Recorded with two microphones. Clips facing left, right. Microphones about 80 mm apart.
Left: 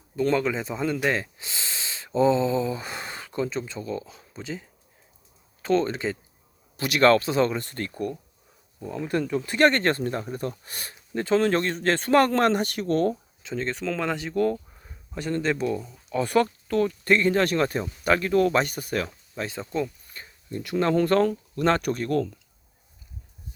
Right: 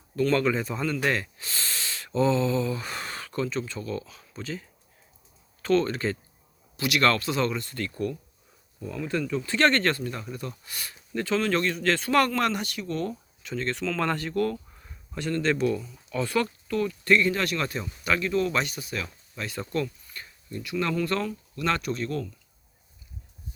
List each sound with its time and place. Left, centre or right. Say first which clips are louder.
0.2 s speech: even; centre
1.1 s snort: left 1 dB; left
2.1 s speech: left 3 dB; left
5.6 s speech: even; left
6.7 s speech: left 5 dB; left
9.3 s speech: left 2 dB; centre
9.9 s speech: left 5 dB; left
13.4 s speech: left 1 dB; left
14.8 s a sound: left 1 dB; centre
15.6 s speech: right 1 dB; left
19.5 s speech: right 1 dB; centre
20.5 s speech: left 5 dB; left
21.8 s speech: left 5 dB; left